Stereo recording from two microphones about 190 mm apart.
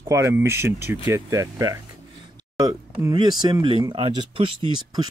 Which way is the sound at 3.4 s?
25° right (ahead or behind).